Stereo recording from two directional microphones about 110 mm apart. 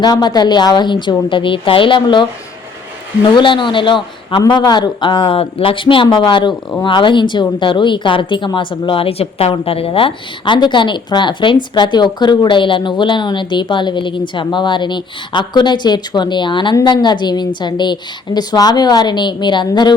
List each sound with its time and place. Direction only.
0.0 s a woman's voice: 40° left (ahead or behind)
3.3 s a woman's voice: 45° left (ahead or behind)